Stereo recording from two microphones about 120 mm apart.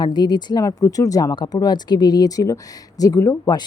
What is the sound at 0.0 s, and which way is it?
Speech, 35° left (ahead or behind).